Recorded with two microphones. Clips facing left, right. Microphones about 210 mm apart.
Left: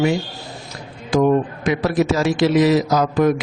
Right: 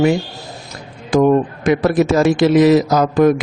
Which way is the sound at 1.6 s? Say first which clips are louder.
Right 5 dB; 50° right (ahead or behind).